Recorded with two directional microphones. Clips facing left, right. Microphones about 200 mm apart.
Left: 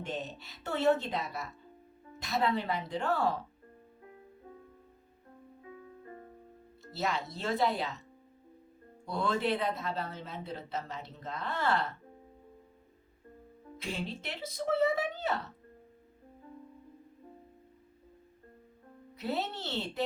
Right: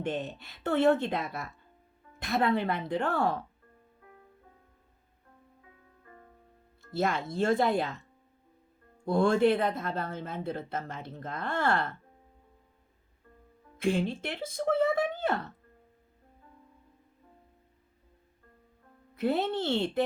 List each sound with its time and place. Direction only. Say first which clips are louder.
0.0 s a woman's voice: right 5 dB; 55° right (ahead or behind)
6.1 s music: left 4 dB; 30° left (ahead or behind)
6.9 s speech: right 5 dB; 50° right (ahead or behind)
9.0 s speech: right 8 dB; 50° right (ahead or behind)
13.7 s speech: right 10 dB; 50° right (ahead or behind)
19.1 s speech: right 7 dB; 55° right (ahead or behind)